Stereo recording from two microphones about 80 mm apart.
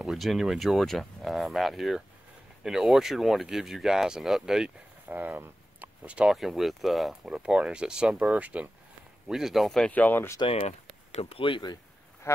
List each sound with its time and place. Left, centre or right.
0.0 s speech: centre
5.0 s a sound: right
6.3 s speech: centre
7.2 s speech: centre
9.3 s speech: centre
9.8 s speech: left
11.4 s speech: left